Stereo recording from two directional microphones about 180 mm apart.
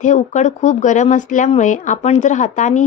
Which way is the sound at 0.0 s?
40° left (ahead or behind).